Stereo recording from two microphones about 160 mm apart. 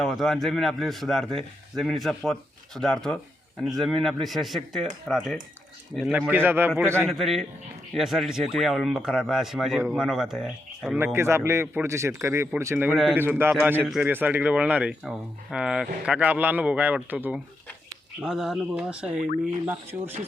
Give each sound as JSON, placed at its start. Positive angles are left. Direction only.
{"t": 0.0, "sound": "a man's voice", "side_deg": 0}
{"t": 7.1, "sound": "a man's voice", "side_deg": 0}
{"t": 10.9, "sound": "a man's voice", "side_deg": -15}